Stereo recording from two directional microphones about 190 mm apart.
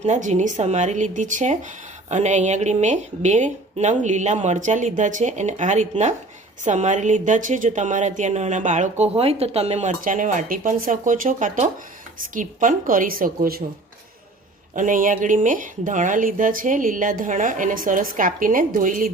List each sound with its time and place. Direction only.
0.0 s a woman's voice: 40° right (ahead or behind)
14.8 s speech: 45° right (ahead or behind)